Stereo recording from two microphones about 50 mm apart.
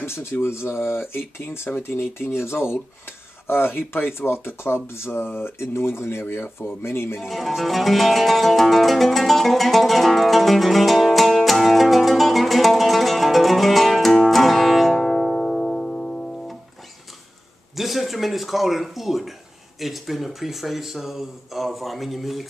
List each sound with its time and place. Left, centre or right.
0.0 s speech: left
7.2 s music: centre
17.7 s speech: centre